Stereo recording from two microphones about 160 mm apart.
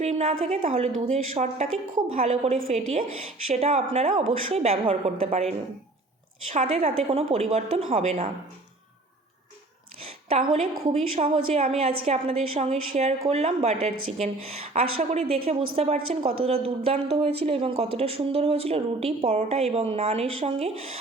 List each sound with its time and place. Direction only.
0.0 s a woman's voice: 45° right (ahead or behind)
10.0 s a woman's voice: 40° right (ahead or behind)